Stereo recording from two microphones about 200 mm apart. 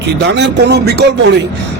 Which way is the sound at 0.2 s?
60° right (ahead or behind).